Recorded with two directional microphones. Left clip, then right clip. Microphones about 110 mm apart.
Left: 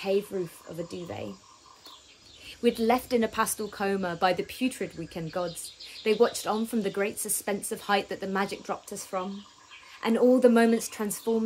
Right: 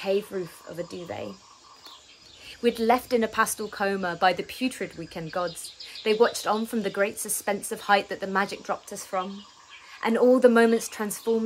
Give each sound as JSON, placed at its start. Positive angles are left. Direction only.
{"t": 0.0, "sound": "speech", "side_deg": -25}
{"t": 2.4, "sound": "speech", "side_deg": -30}
{"t": 6.0, "sound": "speech", "side_deg": -15}
{"t": 9.9, "sound": "speech", "side_deg": -30}
{"t": 11.3, "sound": "speech", "side_deg": -45}